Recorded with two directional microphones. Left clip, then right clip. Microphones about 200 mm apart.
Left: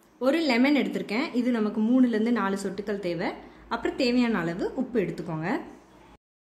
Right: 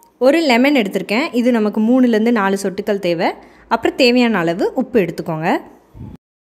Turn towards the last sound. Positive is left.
turn(degrees=-40)  # may be behind; listen again after turning